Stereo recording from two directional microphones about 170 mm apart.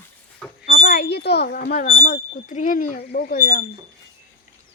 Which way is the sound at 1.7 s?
55° left (ahead or behind).